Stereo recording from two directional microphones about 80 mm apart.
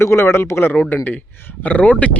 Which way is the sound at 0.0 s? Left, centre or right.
Left.